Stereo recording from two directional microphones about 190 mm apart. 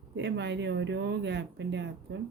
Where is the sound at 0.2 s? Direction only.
65° right (ahead or behind).